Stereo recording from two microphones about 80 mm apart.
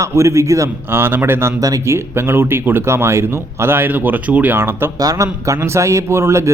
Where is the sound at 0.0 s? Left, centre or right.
Right.